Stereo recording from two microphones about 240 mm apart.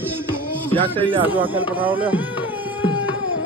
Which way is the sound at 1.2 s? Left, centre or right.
Centre.